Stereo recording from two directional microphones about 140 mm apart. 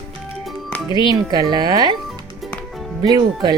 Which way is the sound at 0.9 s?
30° right (ahead or behind).